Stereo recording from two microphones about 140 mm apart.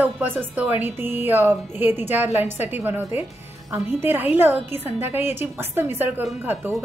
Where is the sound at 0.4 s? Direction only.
15° right (ahead or behind).